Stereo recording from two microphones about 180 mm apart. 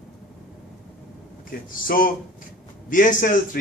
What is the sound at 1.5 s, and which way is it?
A man's voice, 50° left (ahead or behind).